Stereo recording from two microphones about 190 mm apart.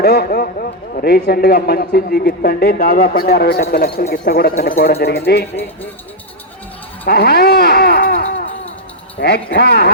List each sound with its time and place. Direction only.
0.0 s a man's voice: 55° left (ahead or behind)
7.1 s a sound: 55° left (ahead or behind)
9.2 s speech: 60° left (ahead or behind)